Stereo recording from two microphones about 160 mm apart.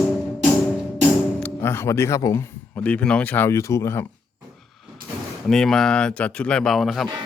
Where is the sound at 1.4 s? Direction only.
15° left (ahead or behind).